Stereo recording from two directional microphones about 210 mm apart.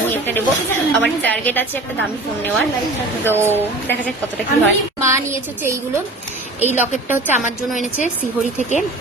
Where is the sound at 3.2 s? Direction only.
10° right (ahead or behind).